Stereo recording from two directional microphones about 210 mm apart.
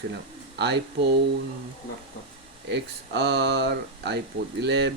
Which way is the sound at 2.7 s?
55° right (ahead or behind).